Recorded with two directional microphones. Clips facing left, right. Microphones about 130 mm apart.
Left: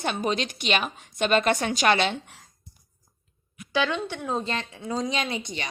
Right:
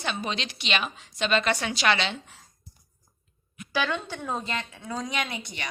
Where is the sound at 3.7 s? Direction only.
20° left (ahead or behind).